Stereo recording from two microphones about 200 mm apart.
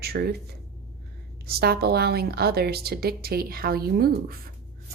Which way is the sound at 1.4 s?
50° right (ahead or behind).